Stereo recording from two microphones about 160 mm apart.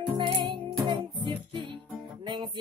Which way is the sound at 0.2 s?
30° right (ahead or behind).